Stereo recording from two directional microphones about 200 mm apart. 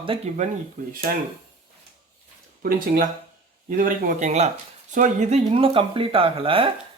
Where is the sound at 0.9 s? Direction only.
45° right (ahead or behind).